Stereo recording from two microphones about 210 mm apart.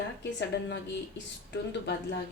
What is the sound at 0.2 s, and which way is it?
Speech, 55° left (ahead or behind).